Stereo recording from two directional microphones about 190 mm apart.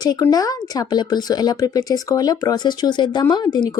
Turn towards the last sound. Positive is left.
turn(degrees=20)  # may be behind; listen again after turning